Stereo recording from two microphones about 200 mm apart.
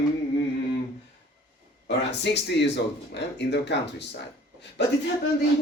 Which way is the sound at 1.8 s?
60° left (ahead or behind).